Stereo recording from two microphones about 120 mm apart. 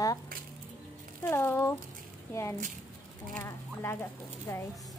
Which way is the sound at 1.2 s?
20° left (ahead or behind).